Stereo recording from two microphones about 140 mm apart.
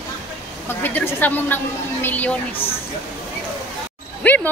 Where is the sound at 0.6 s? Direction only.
15° left (ahead or behind).